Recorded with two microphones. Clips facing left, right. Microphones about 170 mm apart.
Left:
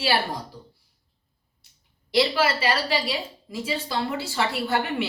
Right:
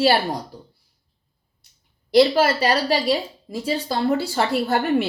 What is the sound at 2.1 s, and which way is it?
A woman's voice, 40° right (ahead or behind).